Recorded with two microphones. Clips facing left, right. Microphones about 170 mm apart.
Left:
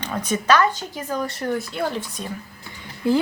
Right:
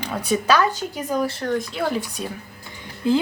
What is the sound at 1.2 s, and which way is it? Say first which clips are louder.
Speech: right 2 dB; 5° left (ahead or behind).